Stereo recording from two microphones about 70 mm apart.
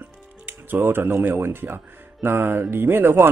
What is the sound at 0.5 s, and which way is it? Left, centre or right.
Speech, right.